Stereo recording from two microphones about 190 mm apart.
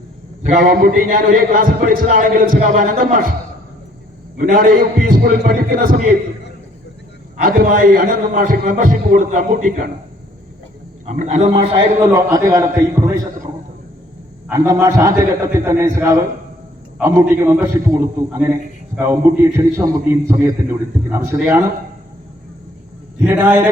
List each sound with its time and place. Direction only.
0.4 s a man's voice: 45° right (ahead or behind)
4.4 s a man's voice: 45° right (ahead or behind)
7.4 s a man's voice: 45° right (ahead or behind)
11.0 s a man's voice: 40° right (ahead or behind)
11.8 s a man's voice: 20° right (ahead or behind)
14.5 s a man's voice: 15° right (ahead or behind)
23.2 s a man's voice: 10° right (ahead or behind)